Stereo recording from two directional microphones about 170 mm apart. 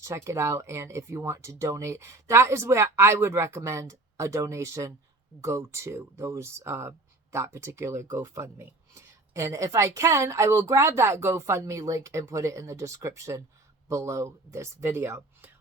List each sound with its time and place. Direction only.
0.0 s speech: 15° right (ahead or behind)